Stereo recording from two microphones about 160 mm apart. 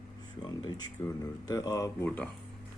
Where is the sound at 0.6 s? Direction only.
25° left (ahead or behind).